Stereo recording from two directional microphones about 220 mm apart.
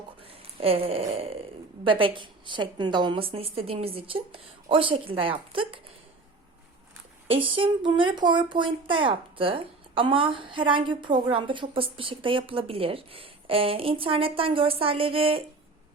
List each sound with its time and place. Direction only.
0.2 s speech: 25° right (ahead or behind)
7.3 s speech: 25° right (ahead or behind)